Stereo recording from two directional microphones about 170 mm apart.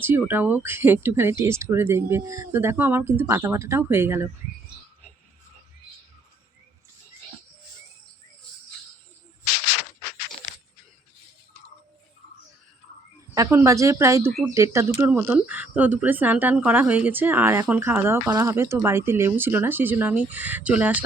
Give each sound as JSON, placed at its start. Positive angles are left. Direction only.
{"t": 0.0, "sound": "speech", "side_deg": -15}
{"t": 13.3, "sound": "speech", "side_deg": -15}